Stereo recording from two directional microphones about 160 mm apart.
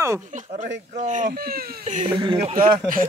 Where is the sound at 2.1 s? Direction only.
25° right (ahead or behind).